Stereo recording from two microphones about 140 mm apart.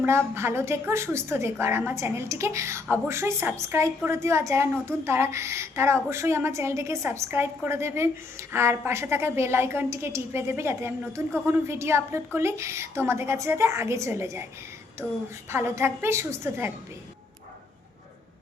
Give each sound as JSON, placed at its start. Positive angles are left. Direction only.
{"t": 0.3, "sound": "a woman's voice", "side_deg": -20}
{"t": 15.0, "sound": "a woman's voice", "side_deg": -5}
{"t": 15.4, "sound": "a woman's voice", "side_deg": -20}